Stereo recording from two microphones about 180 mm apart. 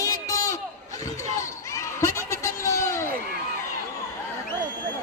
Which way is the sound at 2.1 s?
15° left (ahead or behind).